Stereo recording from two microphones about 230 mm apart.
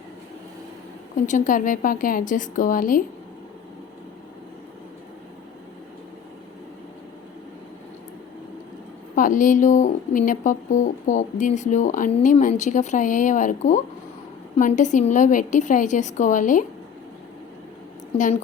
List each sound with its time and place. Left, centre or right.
1.1 s a woman's voice: left
9.1 s a woman's voice: left